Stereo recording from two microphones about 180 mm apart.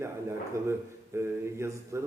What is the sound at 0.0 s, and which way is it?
A man's voice, 15° right (ahead or behind).